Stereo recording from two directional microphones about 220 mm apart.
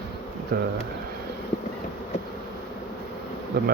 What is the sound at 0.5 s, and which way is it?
Speech, 45° right (ahead or behind).